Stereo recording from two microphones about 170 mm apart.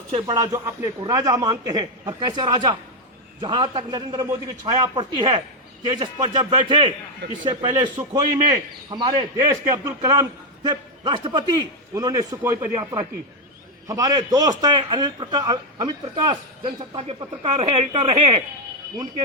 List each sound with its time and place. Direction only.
0.1 s speech: 30° right (ahead or behind)
0.3 s a man's voice: 15° right (ahead or behind); by 18.3 s 35° right (ahead or behind)